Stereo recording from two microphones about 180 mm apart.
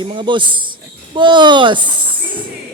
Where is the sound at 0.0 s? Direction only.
25° right (ahead or behind).